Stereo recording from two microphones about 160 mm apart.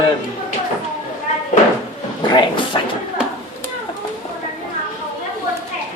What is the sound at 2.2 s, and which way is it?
Speech, 25° left (ahead or behind).